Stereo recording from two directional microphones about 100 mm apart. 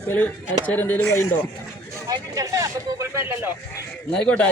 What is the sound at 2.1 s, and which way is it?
Speech, 35° right (ahead or behind).